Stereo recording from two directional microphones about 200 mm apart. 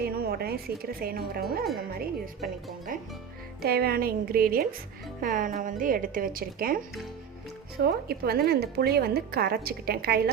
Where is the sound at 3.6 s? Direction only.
50° right (ahead or behind).